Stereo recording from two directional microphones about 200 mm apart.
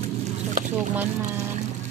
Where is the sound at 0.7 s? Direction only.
10° right (ahead or behind).